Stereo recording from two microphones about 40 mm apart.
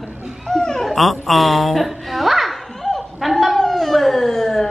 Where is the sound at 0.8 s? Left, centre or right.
Centre.